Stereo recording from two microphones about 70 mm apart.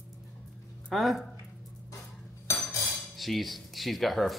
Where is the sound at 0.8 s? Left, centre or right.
Centre.